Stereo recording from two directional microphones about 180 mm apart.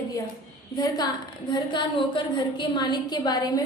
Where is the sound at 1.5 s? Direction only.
25° left (ahead or behind).